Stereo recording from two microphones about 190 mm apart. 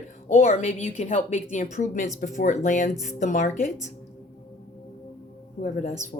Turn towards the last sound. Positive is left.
turn(degrees=40)  # may be behind; listen again after turning